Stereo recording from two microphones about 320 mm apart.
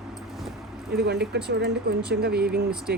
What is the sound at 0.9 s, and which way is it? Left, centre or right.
Speech, right.